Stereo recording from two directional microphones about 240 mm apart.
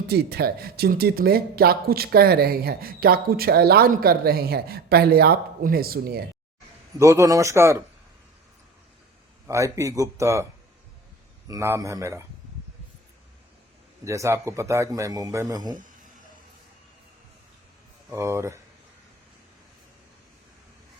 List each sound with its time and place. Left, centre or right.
0.1 s speech: right
7.0 s a man's voice: centre
9.5 s a man's voice: centre
11.4 s a man's voice: centre
14.0 s a man's voice: centre
18.1 s a man's voice: centre